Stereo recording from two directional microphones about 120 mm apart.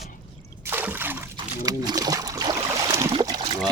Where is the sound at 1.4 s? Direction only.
35° right (ahead or behind).